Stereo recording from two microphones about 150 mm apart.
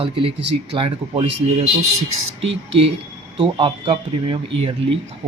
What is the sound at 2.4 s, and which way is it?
Speech, 40° right (ahead or behind).